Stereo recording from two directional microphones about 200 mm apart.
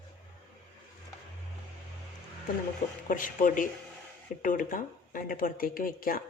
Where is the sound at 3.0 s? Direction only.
40° left (ahead or behind).